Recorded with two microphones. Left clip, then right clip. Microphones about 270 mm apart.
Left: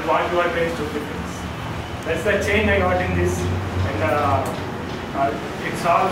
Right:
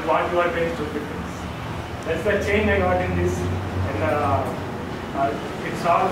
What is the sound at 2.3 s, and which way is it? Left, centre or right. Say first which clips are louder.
Speech: left 2 dB; centre.